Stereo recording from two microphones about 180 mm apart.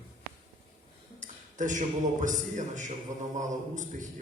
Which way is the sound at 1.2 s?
45° right (ahead or behind).